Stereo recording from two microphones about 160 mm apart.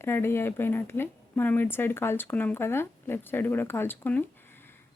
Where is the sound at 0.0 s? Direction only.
15° left (ahead or behind).